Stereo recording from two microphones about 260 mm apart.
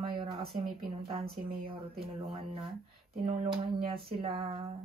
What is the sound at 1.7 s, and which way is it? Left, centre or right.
Speech, right.